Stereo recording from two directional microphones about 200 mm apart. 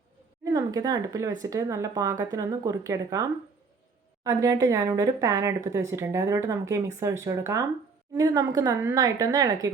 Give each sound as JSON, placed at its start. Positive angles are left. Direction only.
{"t": 0.5, "sound": "speech", "side_deg": -20}